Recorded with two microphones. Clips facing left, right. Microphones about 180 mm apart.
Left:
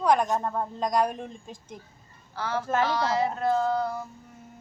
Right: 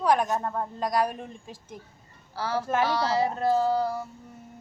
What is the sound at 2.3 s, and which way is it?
Speech, 35° right (ahead or behind).